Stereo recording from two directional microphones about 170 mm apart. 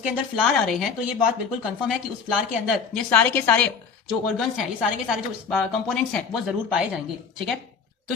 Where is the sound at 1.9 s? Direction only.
Centre (ahead or behind).